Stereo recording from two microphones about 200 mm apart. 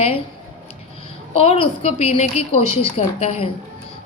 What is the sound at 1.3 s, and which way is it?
A woman's voice, 30° left (ahead or behind).